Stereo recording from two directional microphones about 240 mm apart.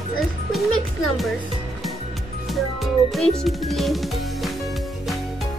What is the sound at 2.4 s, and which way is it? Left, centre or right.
Music, centre.